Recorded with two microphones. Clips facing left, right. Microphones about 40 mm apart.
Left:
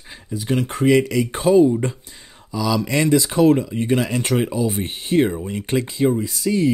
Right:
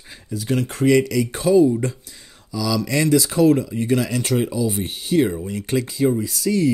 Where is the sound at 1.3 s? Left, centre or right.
Left.